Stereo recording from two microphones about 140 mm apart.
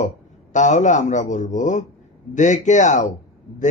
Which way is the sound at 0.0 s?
60° left (ahead or behind).